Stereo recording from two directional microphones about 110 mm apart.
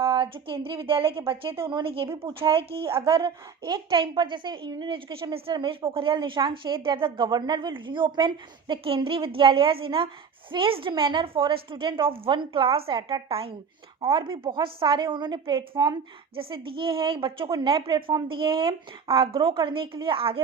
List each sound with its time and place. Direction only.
0.2 s a woman's voice: 50° right (ahead or behind)
3.7 s a woman's voice: 45° right (ahead or behind)